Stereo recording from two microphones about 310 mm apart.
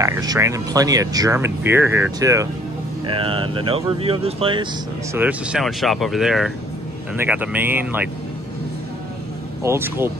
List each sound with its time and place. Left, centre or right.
0.0 s speech: centre
5.1 s speech: centre
9.6 s speech: centre